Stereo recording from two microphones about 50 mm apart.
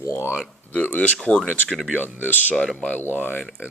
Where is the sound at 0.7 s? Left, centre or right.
Left.